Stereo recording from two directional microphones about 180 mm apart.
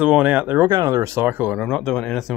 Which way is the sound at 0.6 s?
20° right (ahead or behind).